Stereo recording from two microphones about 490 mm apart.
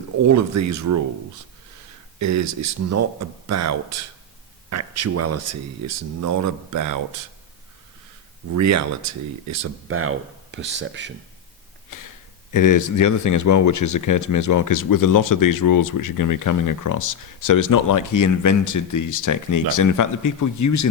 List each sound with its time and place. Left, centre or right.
0.2 s speech: right
2.1 s speech: right
8.4 s speech: right
11.9 s speech: left